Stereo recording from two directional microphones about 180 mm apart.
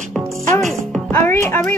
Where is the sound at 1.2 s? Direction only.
15° left (ahead or behind).